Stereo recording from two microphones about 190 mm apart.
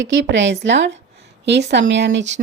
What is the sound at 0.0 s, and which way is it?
A woman's voice, 80° right.